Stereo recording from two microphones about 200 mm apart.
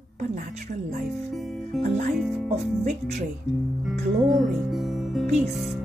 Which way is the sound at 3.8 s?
Centre (ahead or behind).